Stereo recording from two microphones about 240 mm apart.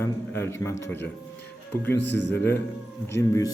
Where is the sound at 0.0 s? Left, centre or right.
Centre.